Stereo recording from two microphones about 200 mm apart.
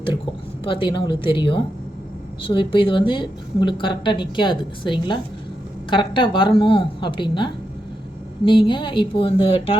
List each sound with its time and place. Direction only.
0.6 s a woman's voice: 25° left (ahead or behind)